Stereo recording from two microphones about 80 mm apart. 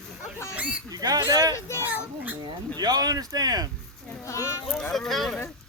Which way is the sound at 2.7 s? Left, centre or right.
Right.